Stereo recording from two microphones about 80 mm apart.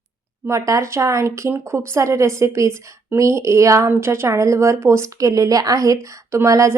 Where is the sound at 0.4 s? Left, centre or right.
Right.